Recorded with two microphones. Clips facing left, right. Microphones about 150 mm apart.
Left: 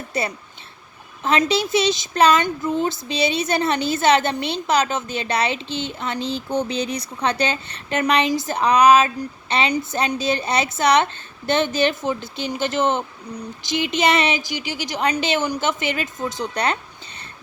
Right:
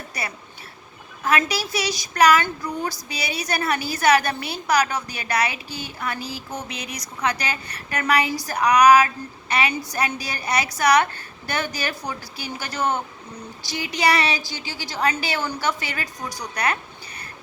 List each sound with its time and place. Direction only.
0.1 s a woman's voice: 25° left (ahead or behind)